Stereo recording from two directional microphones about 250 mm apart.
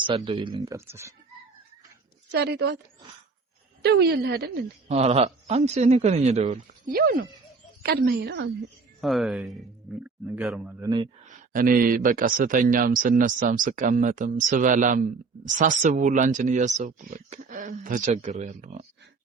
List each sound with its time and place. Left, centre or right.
0.0 s speech: centre
2.3 s a woman's voice: right
3.8 s speech: right
4.9 s speech: right
9.0 s a man's voice: centre
11.3 s speech: right